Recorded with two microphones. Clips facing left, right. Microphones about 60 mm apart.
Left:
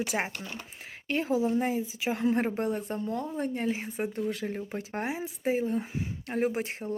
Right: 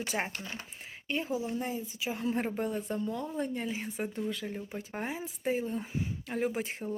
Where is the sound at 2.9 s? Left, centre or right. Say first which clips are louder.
Left 2 dB; left.